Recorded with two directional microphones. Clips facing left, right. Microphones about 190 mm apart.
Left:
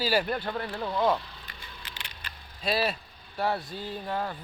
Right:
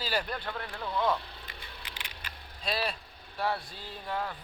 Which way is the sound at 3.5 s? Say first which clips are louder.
Left 4 dB; 20° left (ahead or behind).